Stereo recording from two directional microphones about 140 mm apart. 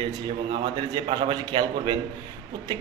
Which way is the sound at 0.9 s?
30° right (ahead or behind).